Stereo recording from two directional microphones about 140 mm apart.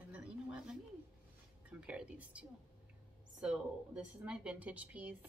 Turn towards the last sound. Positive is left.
turn(degrees=-10)  # may be behind; listen again after turning